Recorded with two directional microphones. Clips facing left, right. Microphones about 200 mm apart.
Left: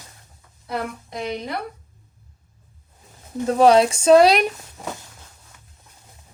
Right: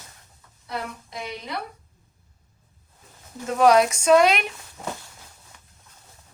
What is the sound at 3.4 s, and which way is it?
Speech, 30° left (ahead or behind).